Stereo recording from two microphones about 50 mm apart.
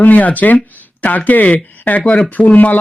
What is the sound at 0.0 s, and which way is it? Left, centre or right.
Speech, left.